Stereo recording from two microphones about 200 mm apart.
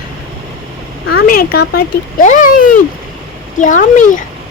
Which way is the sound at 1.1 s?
50° left (ahead or behind).